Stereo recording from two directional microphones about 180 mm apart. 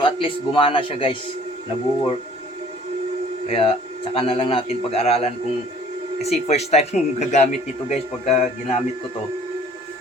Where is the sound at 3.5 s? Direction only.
30° left (ahead or behind).